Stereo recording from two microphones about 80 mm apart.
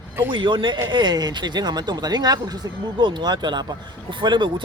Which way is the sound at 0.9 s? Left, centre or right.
Right.